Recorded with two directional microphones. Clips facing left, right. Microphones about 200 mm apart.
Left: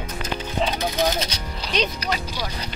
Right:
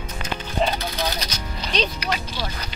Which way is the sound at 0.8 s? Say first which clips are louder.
Left 5 dB; 20° left (ahead or behind).